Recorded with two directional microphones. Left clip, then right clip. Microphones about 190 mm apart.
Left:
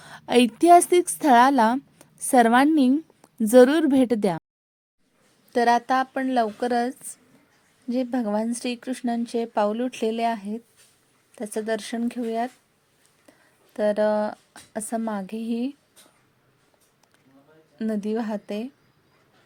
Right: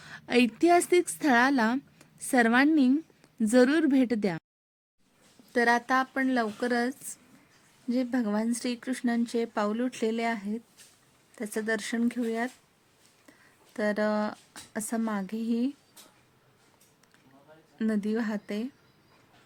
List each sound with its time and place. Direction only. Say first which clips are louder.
0.0 s a woman's voice: left 6 dB; 15° left (ahead or behind)
5.5 s speech: left 5 dB; 10° left (ahead or behind)
13.7 s speech: left 7 dB; 5° left (ahead or behind)
17.7 s speech: left 3 dB; 5° left (ahead or behind)